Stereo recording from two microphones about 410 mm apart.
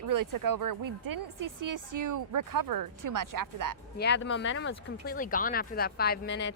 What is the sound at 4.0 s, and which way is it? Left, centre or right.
Speech, left.